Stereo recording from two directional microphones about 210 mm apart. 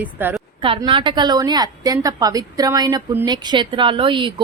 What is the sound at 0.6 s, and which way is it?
A woman's voice, 25° right (ahead or behind).